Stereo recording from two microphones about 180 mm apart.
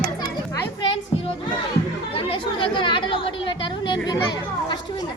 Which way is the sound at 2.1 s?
30° left (ahead or behind).